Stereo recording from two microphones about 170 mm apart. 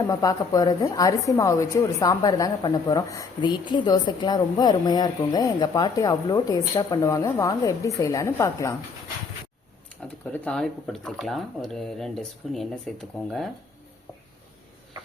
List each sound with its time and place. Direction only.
0.1 s a woman's voice: 20° left (ahead or behind)
10.0 s speech: 5° left (ahead or behind)